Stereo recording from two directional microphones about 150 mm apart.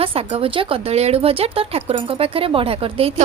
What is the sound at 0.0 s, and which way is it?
Speech, 40° right (ahead or behind).